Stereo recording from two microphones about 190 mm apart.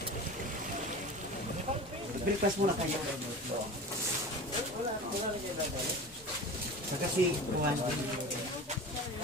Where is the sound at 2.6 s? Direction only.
45° right (ahead or behind).